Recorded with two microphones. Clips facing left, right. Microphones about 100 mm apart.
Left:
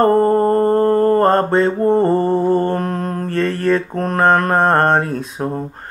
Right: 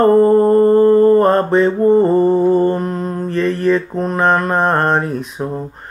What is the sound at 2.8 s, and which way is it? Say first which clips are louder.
Mantra: right 1 dB; 55° left (ahead or behind).